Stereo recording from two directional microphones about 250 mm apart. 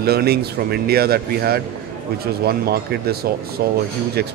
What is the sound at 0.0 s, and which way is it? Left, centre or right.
Speech, right.